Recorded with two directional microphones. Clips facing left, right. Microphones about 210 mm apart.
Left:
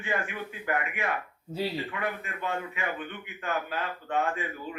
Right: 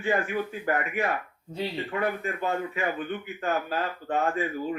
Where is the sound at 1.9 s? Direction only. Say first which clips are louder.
Right 5 dB; 40° right (ahead or behind).